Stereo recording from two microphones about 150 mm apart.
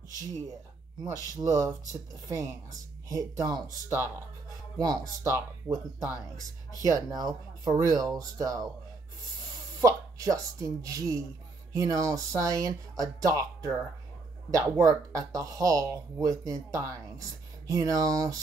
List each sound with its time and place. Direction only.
1.3 s speech: 20° right (ahead or behind)
9.8 s speech: 20° right (ahead or behind)